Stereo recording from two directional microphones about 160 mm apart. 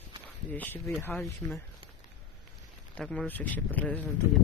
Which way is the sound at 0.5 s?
10° left (ahead or behind).